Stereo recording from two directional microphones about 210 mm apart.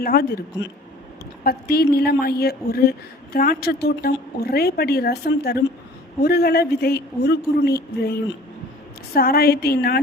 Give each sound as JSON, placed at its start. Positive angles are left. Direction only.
{"t": 0.0, "sound": "speech", "side_deg": 45}
{"t": 1.5, "sound": "speech", "side_deg": 50}